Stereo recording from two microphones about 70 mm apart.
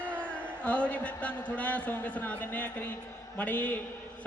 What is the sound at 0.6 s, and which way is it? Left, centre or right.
A man's voice, centre.